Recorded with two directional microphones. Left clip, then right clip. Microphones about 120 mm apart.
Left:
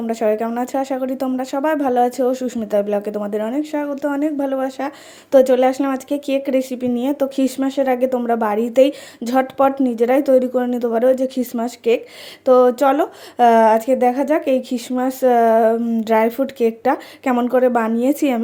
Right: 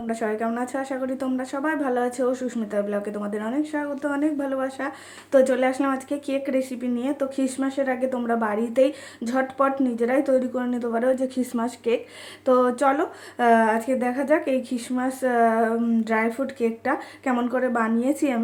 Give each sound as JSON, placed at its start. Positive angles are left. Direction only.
{"t": 0.1, "sound": "speech", "side_deg": 40}
{"t": 16.0, "sound": "speech", "side_deg": 45}